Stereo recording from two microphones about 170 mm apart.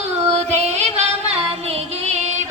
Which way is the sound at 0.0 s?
40° right (ahead or behind).